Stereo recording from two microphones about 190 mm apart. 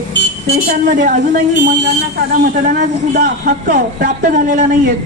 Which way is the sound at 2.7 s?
40° right (ahead or behind).